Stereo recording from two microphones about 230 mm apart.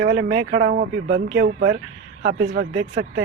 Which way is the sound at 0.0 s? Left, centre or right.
Right.